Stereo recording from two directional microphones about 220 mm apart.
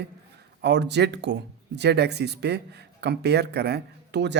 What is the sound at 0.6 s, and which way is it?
Speech, 50° right (ahead or behind).